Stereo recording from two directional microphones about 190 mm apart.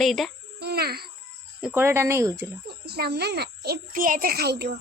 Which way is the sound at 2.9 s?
55° right (ahead or behind).